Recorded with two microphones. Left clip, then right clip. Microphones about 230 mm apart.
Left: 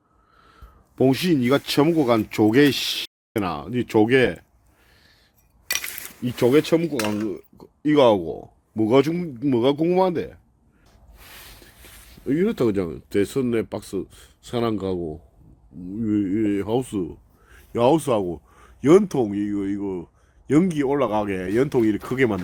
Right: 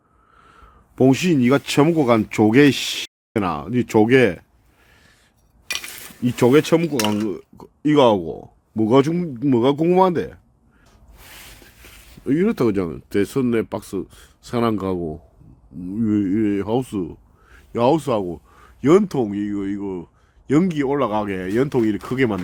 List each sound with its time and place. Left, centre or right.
0.3 s speech: centre
4.9 s a sound: centre
6.2 s speech: right
12.1 s speech: centre